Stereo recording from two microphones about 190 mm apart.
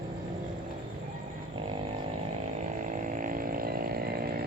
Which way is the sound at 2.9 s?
40° right (ahead or behind).